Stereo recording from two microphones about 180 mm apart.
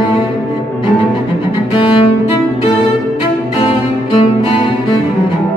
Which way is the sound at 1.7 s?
25° left (ahead or behind).